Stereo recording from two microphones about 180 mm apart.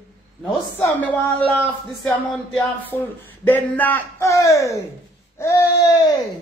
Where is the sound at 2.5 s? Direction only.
10° left (ahead or behind).